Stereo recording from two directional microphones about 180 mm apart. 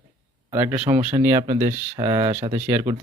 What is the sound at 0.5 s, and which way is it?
A man's voice, 10° right (ahead or behind).